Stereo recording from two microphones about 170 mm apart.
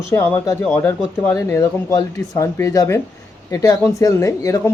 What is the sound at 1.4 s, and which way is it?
Speech, 20° left (ahead or behind).